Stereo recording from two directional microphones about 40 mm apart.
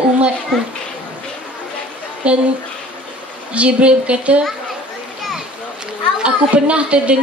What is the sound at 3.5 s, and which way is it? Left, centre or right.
Speech, right.